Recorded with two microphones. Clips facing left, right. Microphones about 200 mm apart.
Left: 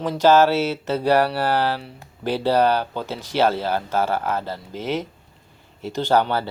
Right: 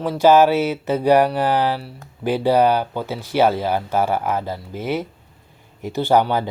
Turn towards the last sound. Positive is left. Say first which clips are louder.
# right 3 dB
turn(degrees=-15)  # may be behind; listen again after turning